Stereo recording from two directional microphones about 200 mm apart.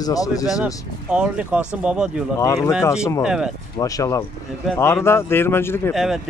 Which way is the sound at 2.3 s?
15° left (ahead or behind).